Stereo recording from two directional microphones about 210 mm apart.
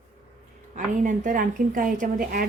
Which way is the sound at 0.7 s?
35° right (ahead or behind).